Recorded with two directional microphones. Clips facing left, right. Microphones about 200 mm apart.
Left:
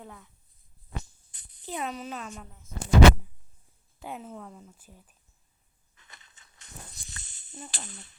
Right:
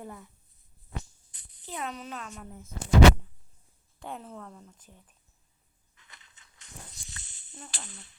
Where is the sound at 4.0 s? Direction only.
5° left (ahead or behind).